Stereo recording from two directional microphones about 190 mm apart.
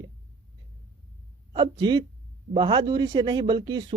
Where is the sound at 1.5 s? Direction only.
25° right (ahead or behind).